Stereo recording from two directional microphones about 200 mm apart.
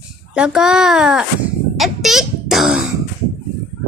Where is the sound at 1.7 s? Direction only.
Centre (ahead or behind).